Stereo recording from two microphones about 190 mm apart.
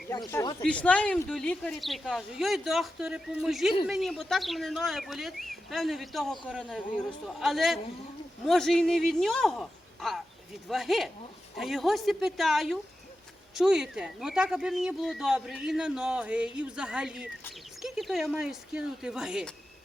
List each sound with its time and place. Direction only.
0.3 s speech: 15° left (ahead or behind); by 19.5 s 5° right (ahead or behind)